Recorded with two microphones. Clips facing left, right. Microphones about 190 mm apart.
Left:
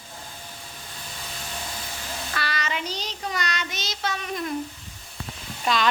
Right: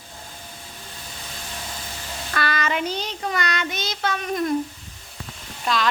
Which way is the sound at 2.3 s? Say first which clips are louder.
Right 6 dB; 50° right (ahead or behind).